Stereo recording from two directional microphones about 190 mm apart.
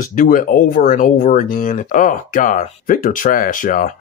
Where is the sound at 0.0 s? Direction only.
45° left (ahead or behind).